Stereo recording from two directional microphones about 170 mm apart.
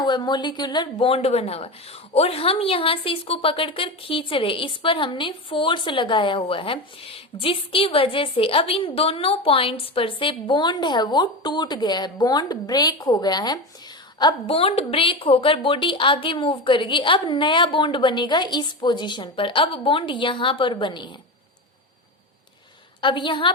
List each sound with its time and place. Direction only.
0.0 s a woman's voice: 25° left (ahead or behind)
23.0 s a woman's voice: 30° left (ahead or behind)